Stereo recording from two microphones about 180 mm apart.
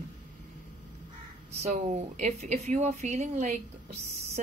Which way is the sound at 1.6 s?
40° right (ahead or behind).